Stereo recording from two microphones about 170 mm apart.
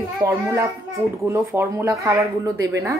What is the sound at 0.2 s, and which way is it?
A woman's voice, 15° right (ahead or behind).